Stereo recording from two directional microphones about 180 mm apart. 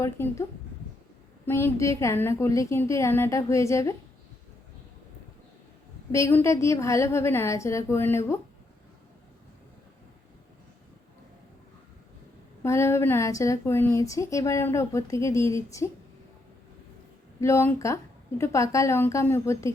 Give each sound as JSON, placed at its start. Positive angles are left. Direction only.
{"t": 0.0, "sound": "speech", "side_deg": 15}
{"t": 1.5, "sound": "speech", "side_deg": 15}
{"t": 6.1, "sound": "speech", "side_deg": 15}
{"t": 12.6, "sound": "speech", "side_deg": 15}
{"t": 17.4, "sound": "speech", "side_deg": 15}